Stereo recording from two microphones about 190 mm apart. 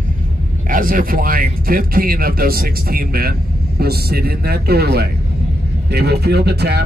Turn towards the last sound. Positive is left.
turn(degrees=-60)  # may be behind; listen again after turning